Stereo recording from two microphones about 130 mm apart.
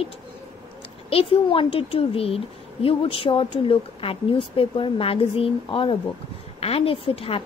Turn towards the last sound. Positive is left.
turn(degrees=45)  # may be behind; listen again after turning